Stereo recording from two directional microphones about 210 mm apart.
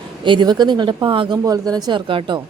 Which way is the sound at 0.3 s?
20° right (ahead or behind).